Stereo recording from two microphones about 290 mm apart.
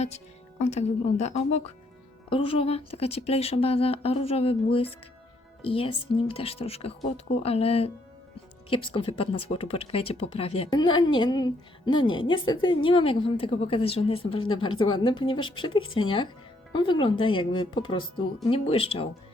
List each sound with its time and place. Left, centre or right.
0.6 s speech: left